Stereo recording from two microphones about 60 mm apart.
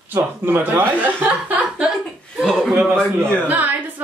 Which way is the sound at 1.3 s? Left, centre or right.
Right.